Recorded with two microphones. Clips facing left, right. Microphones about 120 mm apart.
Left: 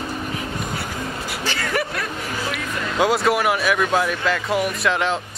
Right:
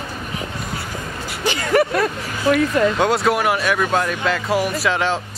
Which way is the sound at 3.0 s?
Centre (ahead or behind).